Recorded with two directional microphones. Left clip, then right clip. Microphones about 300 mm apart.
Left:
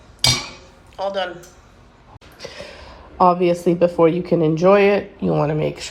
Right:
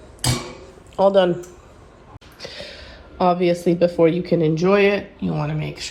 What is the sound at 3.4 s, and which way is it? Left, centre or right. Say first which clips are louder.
Speech: left 1 dB; centre.